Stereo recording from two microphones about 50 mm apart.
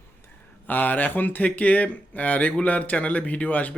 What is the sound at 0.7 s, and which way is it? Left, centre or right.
Speech, left.